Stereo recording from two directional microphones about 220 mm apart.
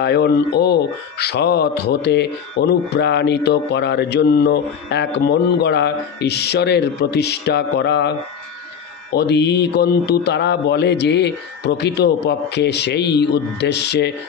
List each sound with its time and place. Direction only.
0.0 s speech: 50° left (ahead or behind)
9.1 s speech: 50° left (ahead or behind)